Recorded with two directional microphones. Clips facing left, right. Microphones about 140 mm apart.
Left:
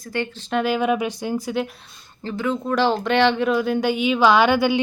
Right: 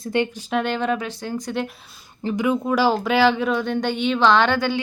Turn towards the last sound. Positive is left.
turn(degrees=10)  # may be behind; listen again after turning